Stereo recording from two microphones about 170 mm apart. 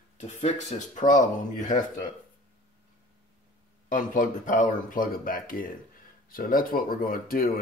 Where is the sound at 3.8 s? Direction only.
50° left (ahead or behind).